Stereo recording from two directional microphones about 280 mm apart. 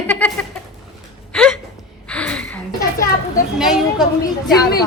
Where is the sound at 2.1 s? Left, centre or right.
Centre.